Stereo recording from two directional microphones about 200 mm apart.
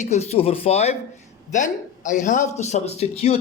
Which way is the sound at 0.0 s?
35° left (ahead or behind).